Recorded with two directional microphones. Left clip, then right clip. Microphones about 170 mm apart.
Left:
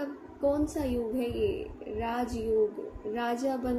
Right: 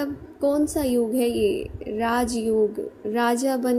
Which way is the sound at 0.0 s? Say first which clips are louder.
Right 6 dB; 50° right (ahead or behind).